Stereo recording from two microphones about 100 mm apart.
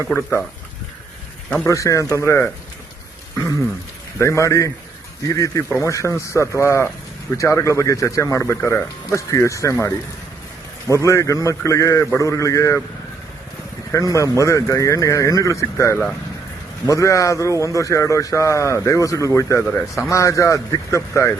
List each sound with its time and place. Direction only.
0.1 s speech: 25° left (ahead or behind)
1.6 s speech: 30° left (ahead or behind)
4.2 s speech: 30° left (ahead or behind)
13.9 s speech: 30° left (ahead or behind)